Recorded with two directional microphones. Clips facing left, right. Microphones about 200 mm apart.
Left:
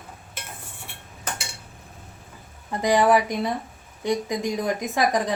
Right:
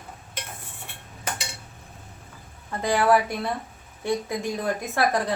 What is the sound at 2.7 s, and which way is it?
A woman's voice, 15° left (ahead or behind).